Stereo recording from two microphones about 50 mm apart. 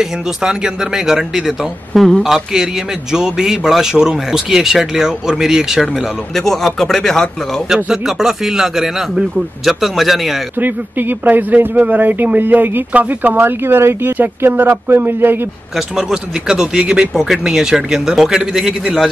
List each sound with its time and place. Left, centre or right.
0.0 s a man's voice: centre
6.3 s speech: centre
7.7 s a man's voice: centre
10.6 s a man's voice: right
13.4 s speech: right
14.1 s speech: right
16.0 s a man's voice: centre